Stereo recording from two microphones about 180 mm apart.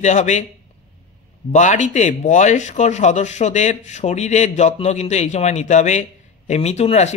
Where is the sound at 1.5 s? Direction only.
40° left (ahead or behind).